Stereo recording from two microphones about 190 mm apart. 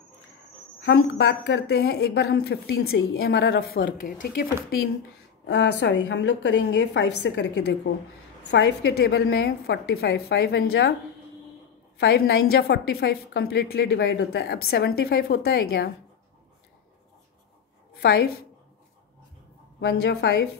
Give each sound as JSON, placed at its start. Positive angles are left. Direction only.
{"t": 0.7, "sound": "a woman's voice", "side_deg": 65}
{"t": 5.5, "sound": "a woman's voice", "side_deg": 65}
{"t": 12.0, "sound": "a woman's voice", "side_deg": 55}
{"t": 18.0, "sound": "a woman's voice", "side_deg": 55}
{"t": 19.8, "sound": "a woman's voice", "side_deg": 65}